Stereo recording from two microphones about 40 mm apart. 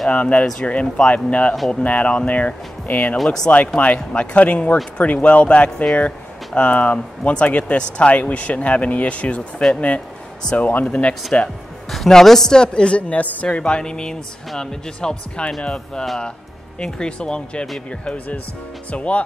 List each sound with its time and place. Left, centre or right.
0.1 s speech: left
10.6 s speech: left
11.3 s speech: left
12.1 s a woman's voice: centre
12.5 s speech: left
13.1 s speech: left
18.0 s speech: left